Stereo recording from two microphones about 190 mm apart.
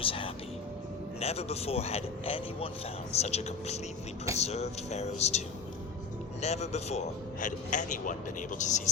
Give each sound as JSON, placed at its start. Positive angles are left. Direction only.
{"t": 0.0, "sound": "whispering", "side_deg": 30}
{"t": 1.2, "sound": "a man's voice", "side_deg": 35}
{"t": 6.4, "sound": "a man's voice", "side_deg": 35}